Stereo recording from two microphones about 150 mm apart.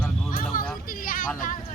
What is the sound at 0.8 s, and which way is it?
Speech, 70° left (ahead or behind).